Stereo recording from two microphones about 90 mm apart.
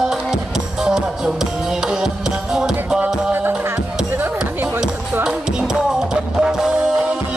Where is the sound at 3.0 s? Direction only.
20° right (ahead or behind).